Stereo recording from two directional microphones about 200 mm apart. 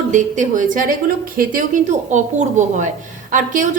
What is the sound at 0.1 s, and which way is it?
A woman's voice, 40° right (ahead or behind).